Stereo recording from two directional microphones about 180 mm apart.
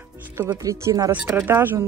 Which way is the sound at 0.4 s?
15° right (ahead or behind).